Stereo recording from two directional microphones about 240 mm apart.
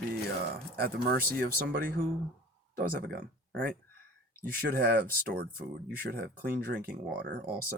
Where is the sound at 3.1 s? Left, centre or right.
Right.